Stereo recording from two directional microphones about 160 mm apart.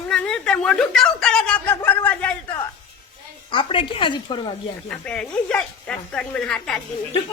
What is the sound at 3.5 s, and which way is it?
A man's voice, 30° left (ahead or behind).